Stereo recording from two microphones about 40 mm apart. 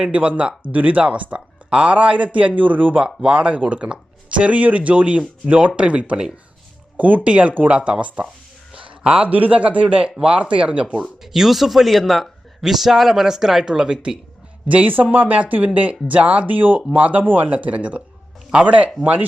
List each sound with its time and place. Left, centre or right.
0.0 s speech: right
3.2 s speech: right
6.9 s speech: right
8.7 s a sound: right
9.2 s speech: right
11.3 s speech: centre
13.7 s speech: centre
14.8 s speech: right